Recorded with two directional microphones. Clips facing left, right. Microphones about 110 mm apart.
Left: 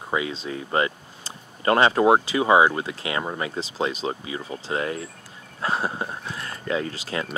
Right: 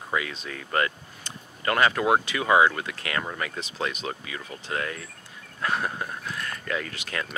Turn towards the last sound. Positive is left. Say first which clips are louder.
# left 4 dB
turn(degrees=30)  # may be behind; listen again after turning